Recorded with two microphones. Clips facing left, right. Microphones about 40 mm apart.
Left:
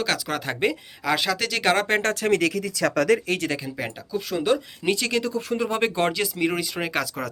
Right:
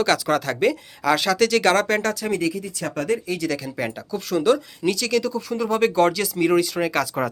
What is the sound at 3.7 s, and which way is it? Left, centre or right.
Speech, centre.